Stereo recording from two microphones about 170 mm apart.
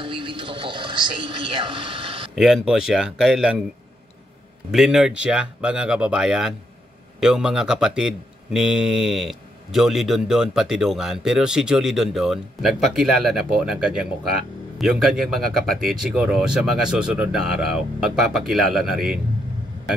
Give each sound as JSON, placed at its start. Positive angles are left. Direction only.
{"t": 0.0, "sound": "television", "side_deg": -30}
{"t": 2.3, "sound": "speech", "side_deg": 0}
{"t": 4.6, "sound": "speech", "side_deg": 0}